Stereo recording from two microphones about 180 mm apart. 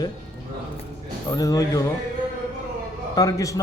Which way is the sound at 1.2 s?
20° left (ahead or behind).